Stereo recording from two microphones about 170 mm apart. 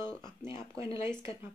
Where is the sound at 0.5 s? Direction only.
35° left (ahead or behind).